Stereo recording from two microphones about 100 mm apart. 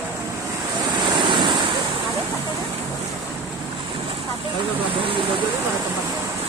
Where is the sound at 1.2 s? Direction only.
50° right (ahead or behind).